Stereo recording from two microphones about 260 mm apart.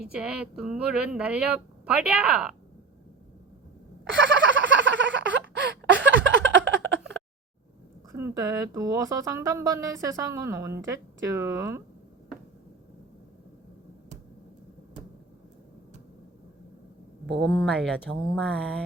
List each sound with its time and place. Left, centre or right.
0.1 s a woman's voice: centre
4.1 s a sound: right
8.4 s speech: centre
17.4 s a woman's voice: centre